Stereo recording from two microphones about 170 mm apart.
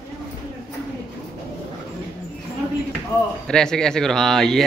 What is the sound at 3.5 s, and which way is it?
Speech, 5° left (ahead or behind).